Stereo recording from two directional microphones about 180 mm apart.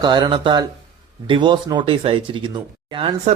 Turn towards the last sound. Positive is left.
turn(degrees=-30)  # may be behind; listen again after turning